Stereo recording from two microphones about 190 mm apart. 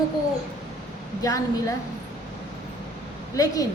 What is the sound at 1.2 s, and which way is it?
Speech, 15° left (ahead or behind).